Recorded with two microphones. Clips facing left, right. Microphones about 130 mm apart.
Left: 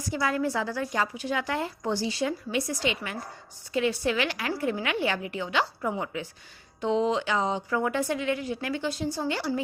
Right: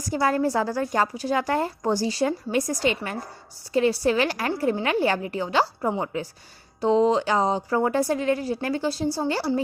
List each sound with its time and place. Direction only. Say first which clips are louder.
0.0 s a woman's voice: right 5 dB; 40° right (ahead or behind)